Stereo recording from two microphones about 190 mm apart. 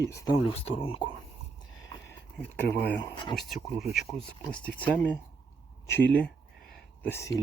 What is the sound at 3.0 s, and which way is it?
Speech, 25° left (ahead or behind).